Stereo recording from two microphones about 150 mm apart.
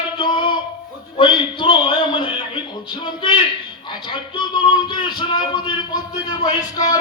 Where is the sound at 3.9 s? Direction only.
30° left (ahead or behind).